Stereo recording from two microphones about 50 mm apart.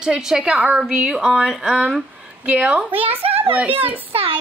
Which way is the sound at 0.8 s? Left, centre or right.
Centre.